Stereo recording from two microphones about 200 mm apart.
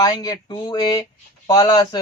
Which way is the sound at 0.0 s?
20° left (ahead or behind).